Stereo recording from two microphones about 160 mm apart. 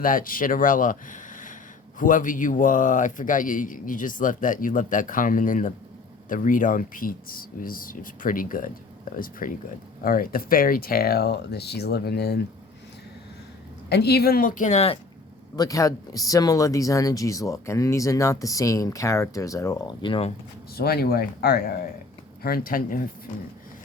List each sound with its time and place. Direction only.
0.0 s a man's voice: 60° left (ahead or behind); by 12.4 s 90° left
13.9 s a man's voice: 90° left; by 14.9 s 45° left (ahead or behind)
15.5 s speech: 20° left (ahead or behind)
20.7 s a man's voice: 75° left (ahead or behind)